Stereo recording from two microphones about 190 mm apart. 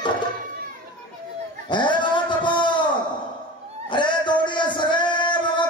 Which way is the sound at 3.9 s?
25° left (ahead or behind).